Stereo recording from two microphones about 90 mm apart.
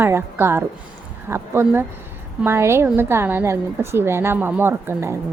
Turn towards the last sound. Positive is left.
turn(degrees=-30)  # may be behind; listen again after turning